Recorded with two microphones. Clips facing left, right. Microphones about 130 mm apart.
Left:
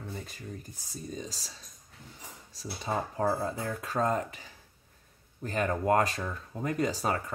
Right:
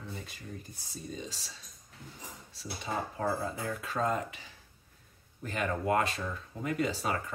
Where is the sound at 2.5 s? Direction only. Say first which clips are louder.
Left 3 dB; 40° left (ahead or behind).